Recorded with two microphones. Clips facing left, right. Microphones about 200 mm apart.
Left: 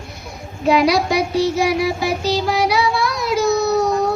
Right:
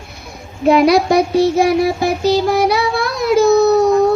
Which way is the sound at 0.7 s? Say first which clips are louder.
Right 5 dB; 55° right (ahead or behind).